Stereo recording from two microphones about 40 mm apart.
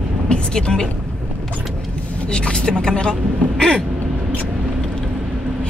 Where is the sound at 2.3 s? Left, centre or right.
Left.